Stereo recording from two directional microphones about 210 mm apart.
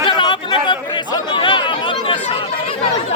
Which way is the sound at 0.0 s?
20° left (ahead or behind).